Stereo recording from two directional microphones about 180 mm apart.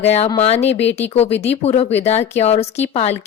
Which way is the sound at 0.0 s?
35° left (ahead or behind).